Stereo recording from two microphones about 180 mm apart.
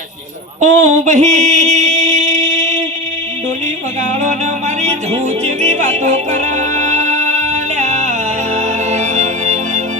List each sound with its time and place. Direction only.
0.6 s mantra: 40° right (ahead or behind)
4.8 s music: 40° right (ahead or behind)